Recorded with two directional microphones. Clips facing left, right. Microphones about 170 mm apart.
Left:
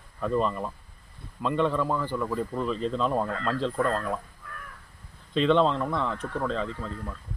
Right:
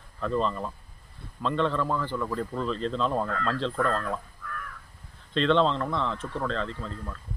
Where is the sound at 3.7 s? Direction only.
15° left (ahead or behind).